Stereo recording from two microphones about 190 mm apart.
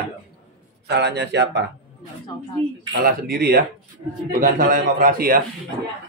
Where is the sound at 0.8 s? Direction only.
60° right (ahead or behind).